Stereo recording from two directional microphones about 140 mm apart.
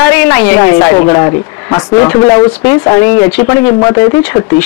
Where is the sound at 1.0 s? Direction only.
30° left (ahead or behind).